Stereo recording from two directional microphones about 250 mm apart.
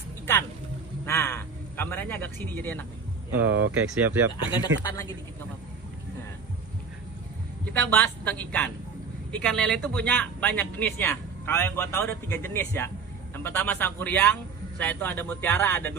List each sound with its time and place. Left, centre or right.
1.0 s a sound: centre
3.3 s speech: centre
4.3 s speech: centre
7.6 s speech: centre